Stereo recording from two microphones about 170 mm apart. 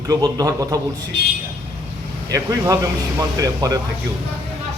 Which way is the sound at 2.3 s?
20° right (ahead or behind).